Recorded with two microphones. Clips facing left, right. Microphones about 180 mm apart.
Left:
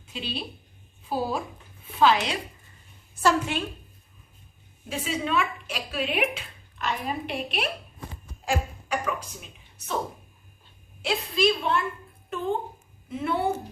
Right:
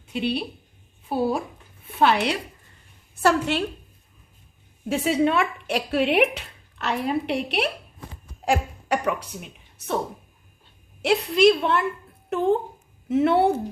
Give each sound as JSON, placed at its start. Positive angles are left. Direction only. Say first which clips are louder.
{"t": 0.1, "sound": "a woman's voice", "louder": "right 9 dB", "side_deg": -60}
{"t": 2.0, "sound": "a woman's voice", "louder": "right 1 dB", "side_deg": -60}
{"t": 4.9, "sound": "a woman's voice", "louder": "right 8 dB", "side_deg": -65}
{"t": 11.0, "sound": "speech", "louder": "right 7 dB", "side_deg": -70}